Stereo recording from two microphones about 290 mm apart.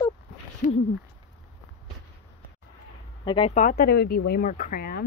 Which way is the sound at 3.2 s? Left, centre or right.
Centre.